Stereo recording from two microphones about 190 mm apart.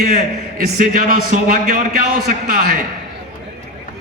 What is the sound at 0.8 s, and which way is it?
A man's voice, 45° right (ahead or behind).